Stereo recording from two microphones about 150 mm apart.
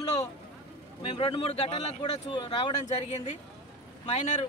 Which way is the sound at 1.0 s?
35° left (ahead or behind).